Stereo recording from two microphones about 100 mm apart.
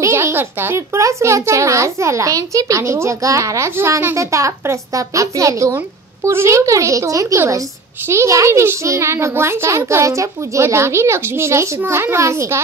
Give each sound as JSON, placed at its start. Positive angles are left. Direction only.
{"t": 0.0, "sound": "a child's voice", "side_deg": -25}